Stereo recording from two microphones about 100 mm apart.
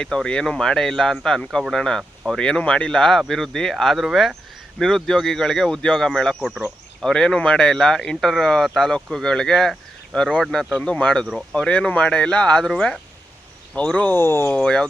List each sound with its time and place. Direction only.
0.0 s speech: 5° left (ahead or behind)
14.1 s speech: 25° left (ahead or behind)
14.5 s speech: 10° left (ahead or behind)